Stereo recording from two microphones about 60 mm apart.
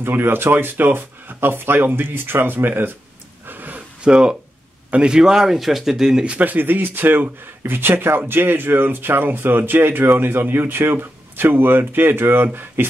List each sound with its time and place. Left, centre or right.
0.0 s speech: right
3.4 s a sound: right
4.0 s speech: centre
6.2 s speech: right